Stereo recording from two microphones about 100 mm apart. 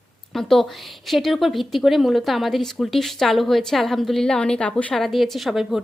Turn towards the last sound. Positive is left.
turn(degrees=0)  # may be behind; listen again after turning